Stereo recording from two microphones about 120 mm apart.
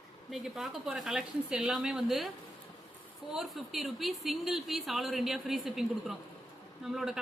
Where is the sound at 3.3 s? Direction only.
Centre (ahead or behind).